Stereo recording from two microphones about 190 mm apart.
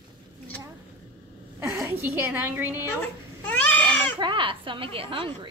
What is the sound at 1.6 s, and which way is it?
A woman's voice, 10° right (ahead or behind).